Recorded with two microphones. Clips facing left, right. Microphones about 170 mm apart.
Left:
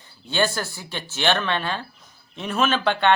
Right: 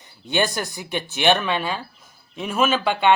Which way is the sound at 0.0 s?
15° right (ahead or behind).